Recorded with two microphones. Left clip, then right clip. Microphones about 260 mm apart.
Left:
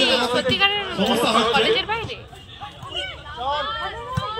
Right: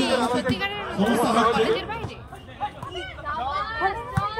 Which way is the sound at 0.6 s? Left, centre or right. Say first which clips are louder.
Left 7 dB; centre.